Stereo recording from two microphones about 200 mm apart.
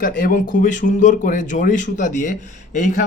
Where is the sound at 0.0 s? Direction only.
45° left (ahead or behind).